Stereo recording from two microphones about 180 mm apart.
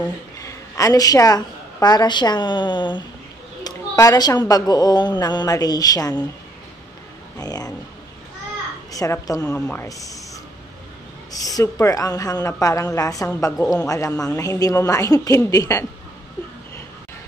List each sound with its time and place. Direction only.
0.4 s a woman's voice: 20° left (ahead or behind)
7.3 s a woman's voice: 20° left (ahead or behind)
8.9 s a woman's voice: 20° left (ahead or behind)